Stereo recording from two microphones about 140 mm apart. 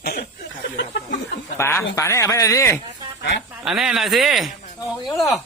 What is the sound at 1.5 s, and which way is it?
Speech, 20° left (ahead or behind).